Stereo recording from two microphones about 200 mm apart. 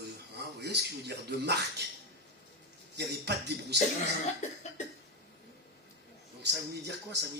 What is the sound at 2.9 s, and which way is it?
Speech, 55° right (ahead or behind).